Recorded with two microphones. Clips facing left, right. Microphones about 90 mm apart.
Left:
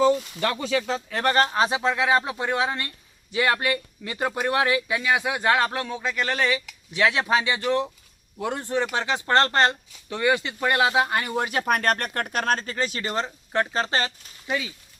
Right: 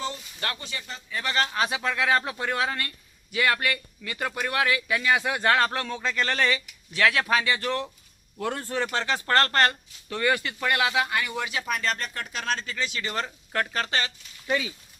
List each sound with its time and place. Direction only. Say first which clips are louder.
0.8 s speech: left 9 dB; 90° left
1.2 s speech: left 5 dB; 40° left (ahead or behind); by 6.6 s 10° left (ahead or behind)
6.9 s speech: left 1 dB; 20° left (ahead or behind); by 13.1 s 40° left (ahead or behind)
13.1 s speech: left 4 dB; 25° left (ahead or behind)